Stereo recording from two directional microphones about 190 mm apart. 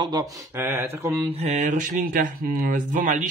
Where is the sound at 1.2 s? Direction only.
35° right (ahead or behind).